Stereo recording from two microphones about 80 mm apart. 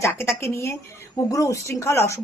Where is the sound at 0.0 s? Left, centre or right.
Left.